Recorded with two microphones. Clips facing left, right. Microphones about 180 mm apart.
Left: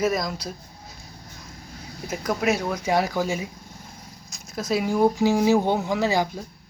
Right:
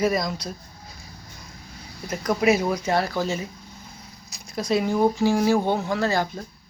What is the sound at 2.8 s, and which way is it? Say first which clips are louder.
Speech: left 1 dB; 15° left (ahead or behind).